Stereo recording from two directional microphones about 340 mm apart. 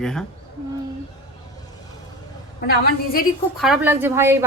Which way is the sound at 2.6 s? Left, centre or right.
Left.